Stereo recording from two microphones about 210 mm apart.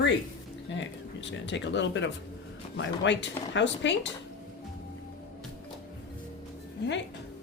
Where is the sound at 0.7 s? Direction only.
60° left (ahead or behind).